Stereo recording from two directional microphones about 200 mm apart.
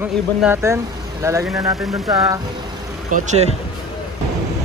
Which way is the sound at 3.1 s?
35° right (ahead or behind).